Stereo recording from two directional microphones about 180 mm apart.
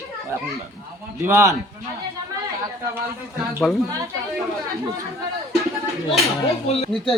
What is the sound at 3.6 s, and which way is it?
Speech, centre (ahead or behind).